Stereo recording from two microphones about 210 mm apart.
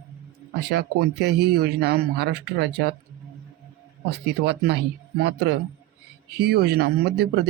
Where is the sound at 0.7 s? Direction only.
50° right (ahead or behind).